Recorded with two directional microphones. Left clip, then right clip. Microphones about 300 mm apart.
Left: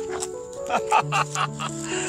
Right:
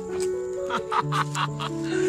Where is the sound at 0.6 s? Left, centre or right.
Centre.